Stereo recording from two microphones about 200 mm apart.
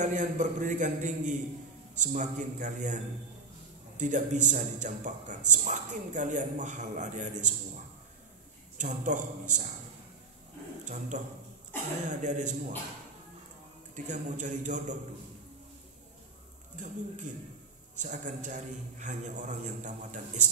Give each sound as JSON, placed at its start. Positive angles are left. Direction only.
{"t": 0.0, "sound": "a man's voice", "side_deg": -40}
{"t": 8.7, "sound": "a man's voice", "side_deg": -40}
{"t": 10.9, "sound": "a man's voice", "side_deg": -40}
{"t": 13.9, "sound": "a man's voice", "side_deg": -35}
{"t": 16.7, "sound": "a man's voice", "side_deg": -40}